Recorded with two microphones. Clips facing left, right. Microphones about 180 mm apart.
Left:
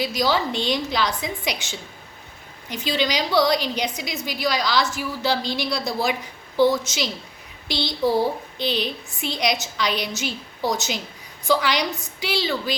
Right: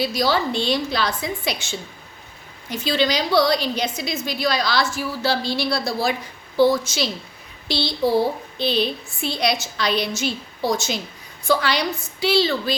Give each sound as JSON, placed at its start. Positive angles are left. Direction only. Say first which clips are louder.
{"t": 0.0, "sound": "a woman's voice", "louder": "right 1 dB", "side_deg": 15}
{"t": 2.6, "sound": "a woman's voice", "louder": "right 3 dB", "side_deg": 15}